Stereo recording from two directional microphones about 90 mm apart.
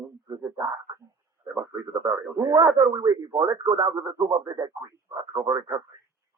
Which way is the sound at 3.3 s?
15° right (ahead or behind).